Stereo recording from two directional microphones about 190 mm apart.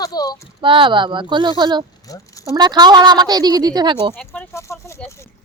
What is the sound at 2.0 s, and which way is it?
Speech, 15° left (ahead or behind).